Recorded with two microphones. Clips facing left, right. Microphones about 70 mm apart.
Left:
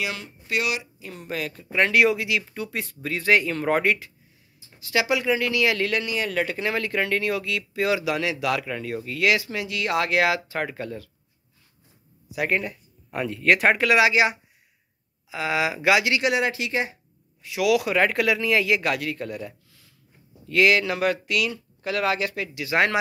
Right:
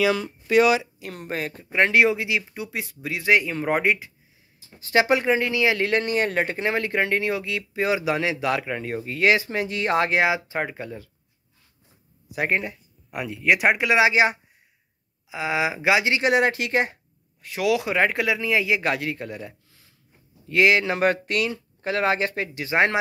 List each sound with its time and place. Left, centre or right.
0.9 s speech: right
1.3 s speech: right; by 4.1 s centre
4.7 s speech: right
5.9 s speech: right; by 11.1 s centre
12.4 s speech: right
13.1 s speech: centre
13.8 s speech: right
15.2 s speech: right
17.6 s speech: right